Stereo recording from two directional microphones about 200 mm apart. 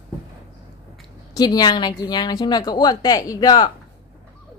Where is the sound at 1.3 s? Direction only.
20° left (ahead or behind).